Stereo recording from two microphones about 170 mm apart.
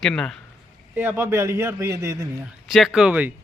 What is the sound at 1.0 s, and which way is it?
A man's voice, 10° right (ahead or behind).